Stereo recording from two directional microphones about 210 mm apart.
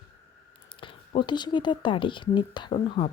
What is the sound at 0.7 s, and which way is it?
Speech, 25° left (ahead or behind).